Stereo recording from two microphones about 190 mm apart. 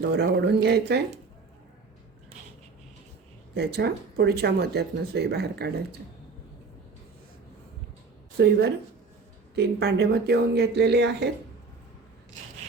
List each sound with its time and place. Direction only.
0.0 s speech: 60° right (ahead or behind)
3.5 s speech: 60° right (ahead or behind)
8.4 s speech: 60° right (ahead or behind)